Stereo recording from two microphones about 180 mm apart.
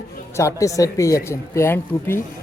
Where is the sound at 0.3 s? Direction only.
15° left (ahead or behind).